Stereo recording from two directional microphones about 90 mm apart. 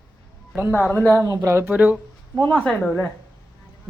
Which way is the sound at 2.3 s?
20° left (ahead or behind).